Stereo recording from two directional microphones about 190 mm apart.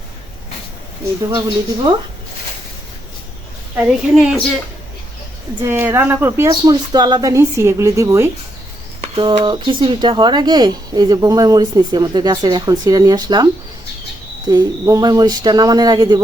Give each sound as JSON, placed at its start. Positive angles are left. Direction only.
{"t": 1.3, "sound": "speech", "side_deg": -20}
{"t": 3.8, "sound": "speech", "side_deg": -5}
{"t": 5.6, "sound": "a woman's voice", "side_deg": -10}
{"t": 14.5, "sound": "speech", "side_deg": -20}